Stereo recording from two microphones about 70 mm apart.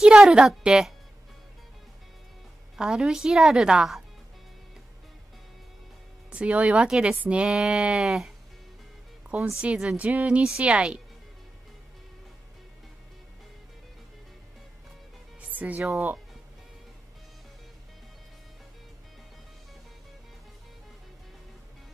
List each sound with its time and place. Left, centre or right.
0.0 s a woman's voice: centre
2.7 s a woman's voice: centre
6.3 s a woman's voice: centre
9.4 s a woman's voice: centre
15.5 s music: right